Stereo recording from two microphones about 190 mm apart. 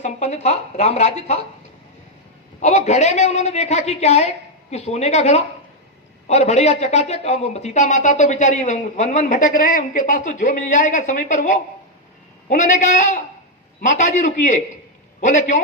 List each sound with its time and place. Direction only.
0.0 s speech: 35° left (ahead or behind)
2.6 s speech: 35° left (ahead or behind)